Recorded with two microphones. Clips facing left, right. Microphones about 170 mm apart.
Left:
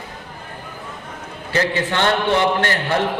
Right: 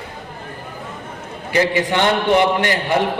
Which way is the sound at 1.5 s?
15° right (ahead or behind).